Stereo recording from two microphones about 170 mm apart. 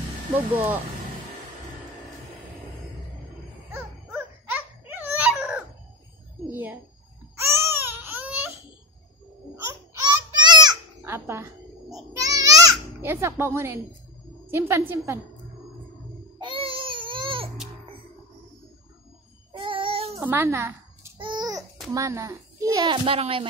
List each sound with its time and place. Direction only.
3.7 s dog: 10° right (ahead or behind)
6.5 s a sound: 10° right (ahead or behind)
7.3 s baby cry: 15° right (ahead or behind)
9.7 s a sound: 25° right (ahead or behind)
14.5 s a woman's voice: 15° right (ahead or behind)
16.3 s baby cry: 30° right (ahead or behind)
19.5 s babbling: 30° right (ahead or behind)
20.2 s a woman's voice: 10° right (ahead or behind)
21.2 s babbling: 25° right (ahead or behind)
21.5 s babbling: centre (ahead or behind)
21.9 s a child's voice: 20° right (ahead or behind)
23.0 s speech: 35° right (ahead or behind)